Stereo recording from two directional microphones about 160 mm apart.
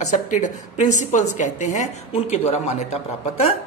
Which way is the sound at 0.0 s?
50° left (ahead or behind).